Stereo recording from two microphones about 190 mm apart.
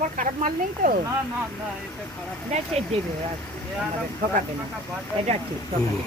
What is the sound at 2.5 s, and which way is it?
Speech, 35° right (ahead or behind).